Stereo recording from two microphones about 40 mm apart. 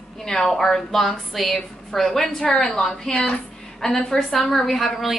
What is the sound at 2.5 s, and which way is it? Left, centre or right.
A woman's voice, centre.